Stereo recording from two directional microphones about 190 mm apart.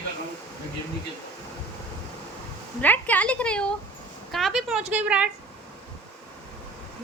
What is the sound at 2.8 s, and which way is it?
A woman's voice, 10° left (ahead or behind).